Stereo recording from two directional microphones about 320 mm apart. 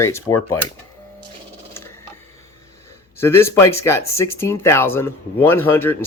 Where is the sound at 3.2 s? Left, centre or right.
Centre.